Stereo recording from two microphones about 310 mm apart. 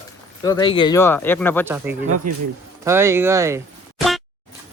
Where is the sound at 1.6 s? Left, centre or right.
Centre.